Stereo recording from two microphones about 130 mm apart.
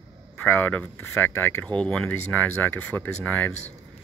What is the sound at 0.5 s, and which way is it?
Speech, 15° left (ahead or behind).